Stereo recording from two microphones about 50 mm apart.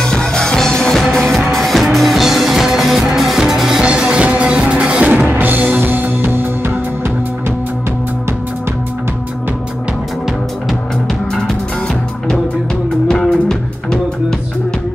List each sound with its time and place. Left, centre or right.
0.0 s music: centre; by 6.7 s right
11.3 s music: centre